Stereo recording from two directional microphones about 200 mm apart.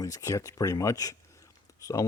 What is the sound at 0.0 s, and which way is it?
Speech, 15° left (ahead or behind).